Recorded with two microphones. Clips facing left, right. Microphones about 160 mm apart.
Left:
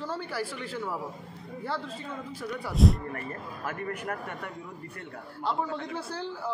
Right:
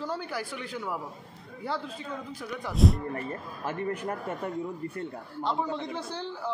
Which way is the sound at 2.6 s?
Centre (ahead or behind).